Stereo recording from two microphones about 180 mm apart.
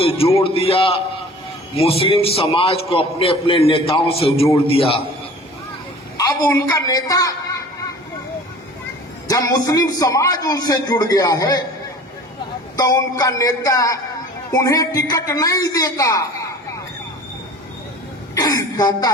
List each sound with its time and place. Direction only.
0.0 s a man's voice: 30° left (ahead or behind)
6.7 s a man's voice: 20° left (ahead or behind)
9.2 s a man's voice: 20° left (ahead or behind)
12.7 s a man's voice: 20° left (ahead or behind)
18.3 s a man's voice: 20° left (ahead or behind)